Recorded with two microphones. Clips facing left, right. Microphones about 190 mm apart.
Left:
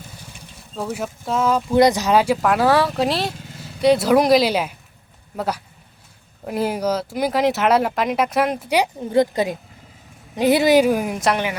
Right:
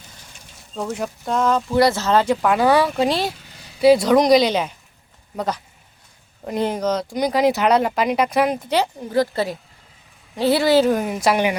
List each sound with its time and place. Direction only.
0.8 s a woman's voice: 5° left (ahead or behind)
8.7 s a woman's voice: 15° left (ahead or behind); by 11.3 s centre (ahead or behind)